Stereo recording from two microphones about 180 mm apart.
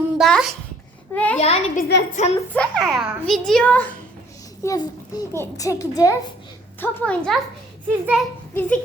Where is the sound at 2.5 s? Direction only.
5° left (ahead or behind).